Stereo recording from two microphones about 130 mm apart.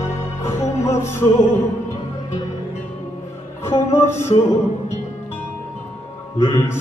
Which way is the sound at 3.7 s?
20° left (ahead or behind).